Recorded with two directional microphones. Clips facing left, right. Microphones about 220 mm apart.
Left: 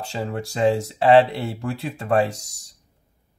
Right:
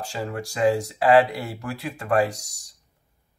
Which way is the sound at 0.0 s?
25° left (ahead or behind).